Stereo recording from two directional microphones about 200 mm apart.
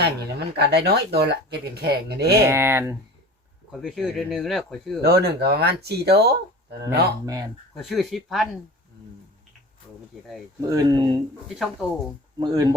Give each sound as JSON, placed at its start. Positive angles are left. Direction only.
{"t": 0.0, "sound": "speech", "side_deg": -55}
{"t": 2.4, "sound": "speech", "side_deg": -15}
{"t": 3.7, "sound": "speech", "side_deg": 0}
{"t": 4.9, "sound": "speech", "side_deg": -55}
{"t": 7.3, "sound": "speech", "side_deg": -15}
{"t": 7.8, "sound": "speech", "side_deg": 0}
{"t": 10.7, "sound": "speech", "side_deg": -20}
{"t": 11.4, "sound": "speech", "side_deg": 0}
{"t": 12.4, "sound": "speech", "side_deg": -20}